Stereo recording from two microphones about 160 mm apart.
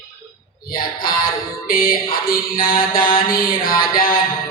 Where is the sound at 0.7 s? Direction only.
65° left (ahead or behind).